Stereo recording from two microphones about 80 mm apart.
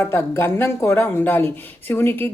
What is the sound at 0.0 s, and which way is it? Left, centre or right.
A woman's voice, left.